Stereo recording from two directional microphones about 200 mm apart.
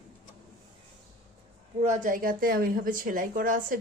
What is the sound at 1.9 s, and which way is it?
A woman's voice, 40° right (ahead or behind).